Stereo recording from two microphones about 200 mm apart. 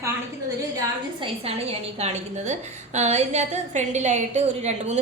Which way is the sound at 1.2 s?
30° right (ahead or behind).